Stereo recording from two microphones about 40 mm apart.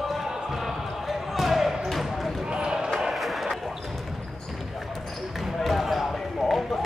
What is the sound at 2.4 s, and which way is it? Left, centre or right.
Basketball bounce, right.